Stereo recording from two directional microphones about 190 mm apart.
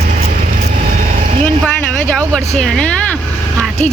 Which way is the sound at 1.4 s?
10° left (ahead or behind).